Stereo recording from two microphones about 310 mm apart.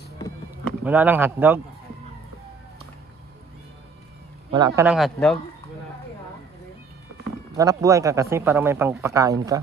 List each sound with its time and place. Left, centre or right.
0.8 s speech: centre
4.5 s speech: centre
7.5 s speech: centre